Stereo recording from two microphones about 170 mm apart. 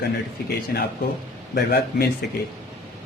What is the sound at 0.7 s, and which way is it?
A man's voice, 60° left (ahead or behind).